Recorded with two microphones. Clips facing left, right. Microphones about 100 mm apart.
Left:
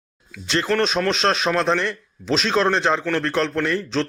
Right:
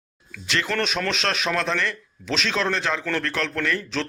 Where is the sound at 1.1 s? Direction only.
35° left (ahead or behind).